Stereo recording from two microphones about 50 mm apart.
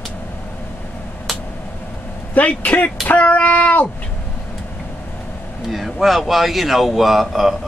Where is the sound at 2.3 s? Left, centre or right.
Left.